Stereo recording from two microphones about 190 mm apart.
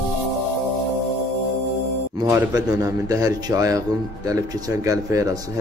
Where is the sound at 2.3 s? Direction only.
20° right (ahead or behind).